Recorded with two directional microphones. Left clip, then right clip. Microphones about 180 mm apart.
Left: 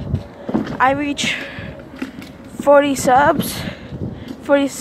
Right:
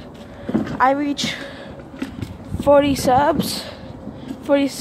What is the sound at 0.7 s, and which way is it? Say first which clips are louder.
Speech: left 1 dB; centre (ahead or behind).